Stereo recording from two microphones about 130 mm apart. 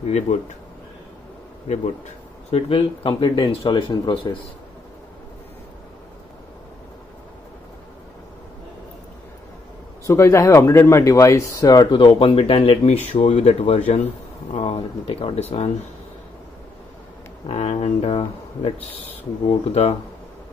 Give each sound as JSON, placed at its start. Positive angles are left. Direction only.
{"t": 0.0, "sound": "speech", "side_deg": 60}
{"t": 2.5, "sound": "speech", "side_deg": 50}
{"t": 10.0, "sound": "speech", "side_deg": 20}
{"t": 17.5, "sound": "speech", "side_deg": 50}